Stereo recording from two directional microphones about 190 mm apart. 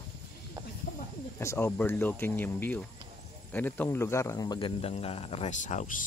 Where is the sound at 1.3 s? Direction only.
10° left (ahead or behind).